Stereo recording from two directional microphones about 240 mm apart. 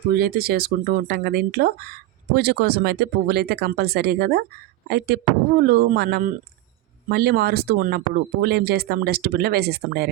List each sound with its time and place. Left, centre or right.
0.2 s speech: right